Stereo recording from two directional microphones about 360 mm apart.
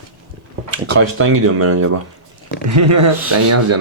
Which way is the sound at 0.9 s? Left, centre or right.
Right.